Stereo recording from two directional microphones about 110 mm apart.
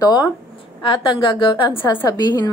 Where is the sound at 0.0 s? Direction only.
35° left (ahead or behind).